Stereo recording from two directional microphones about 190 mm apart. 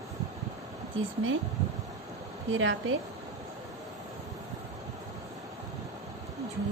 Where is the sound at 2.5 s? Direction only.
90° right.